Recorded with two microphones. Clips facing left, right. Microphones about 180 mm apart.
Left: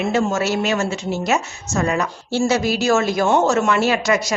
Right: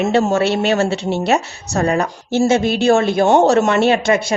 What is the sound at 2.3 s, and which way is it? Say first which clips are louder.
A woman's voice: right 4 dB; 25° right (ahead or behind).